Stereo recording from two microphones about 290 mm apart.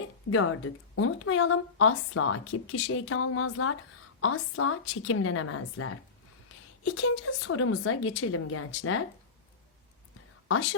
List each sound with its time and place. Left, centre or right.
0.3 s a woman's voice: left
10.5 s a woman's voice: left